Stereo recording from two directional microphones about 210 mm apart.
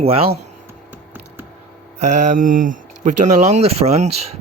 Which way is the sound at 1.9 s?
35° right (ahead or behind).